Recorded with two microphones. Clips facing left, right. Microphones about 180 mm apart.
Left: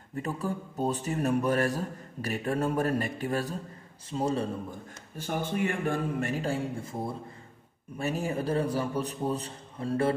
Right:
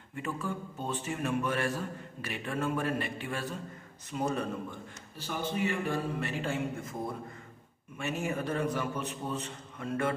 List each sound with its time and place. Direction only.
0.1 s a man's voice: 40° left (ahead or behind)
4.1 s a man's voice: 30° left (ahead or behind)
5.1 s a man's voice: 50° left (ahead or behind); by 10.1 s 30° left (ahead or behind)